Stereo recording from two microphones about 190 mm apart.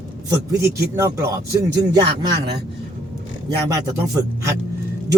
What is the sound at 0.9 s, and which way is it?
Speech, 15° right (ahead or behind).